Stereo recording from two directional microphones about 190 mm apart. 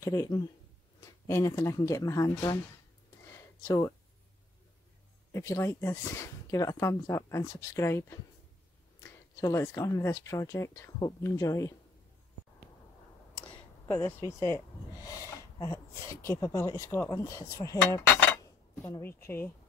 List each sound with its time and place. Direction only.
0.0 s speech: 15° left (ahead or behind)
3.6 s speech: 20° left (ahead or behind)
5.3 s speech: 15° left (ahead or behind)
9.4 s speech: 15° left (ahead or behind)
13.8 s speech: 10° left (ahead or behind)